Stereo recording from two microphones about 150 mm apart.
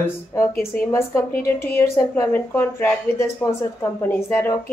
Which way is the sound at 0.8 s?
20° left (ahead or behind).